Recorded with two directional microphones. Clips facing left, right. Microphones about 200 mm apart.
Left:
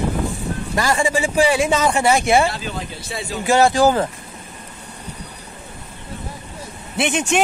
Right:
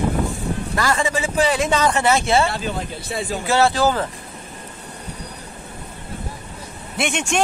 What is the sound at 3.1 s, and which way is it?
Speech, 50° right (ahead or behind).